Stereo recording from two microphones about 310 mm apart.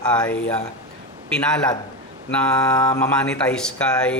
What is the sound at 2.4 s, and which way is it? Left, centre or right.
A man's voice, centre.